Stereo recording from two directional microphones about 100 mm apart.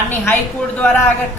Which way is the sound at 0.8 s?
20° left (ahead or behind).